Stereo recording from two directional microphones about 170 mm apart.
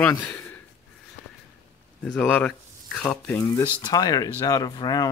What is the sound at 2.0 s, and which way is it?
Speech, 5° left (ahead or behind).